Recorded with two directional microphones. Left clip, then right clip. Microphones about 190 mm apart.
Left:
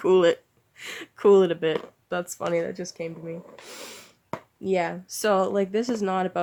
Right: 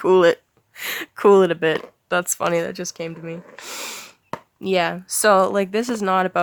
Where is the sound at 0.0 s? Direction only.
30° right (ahead or behind).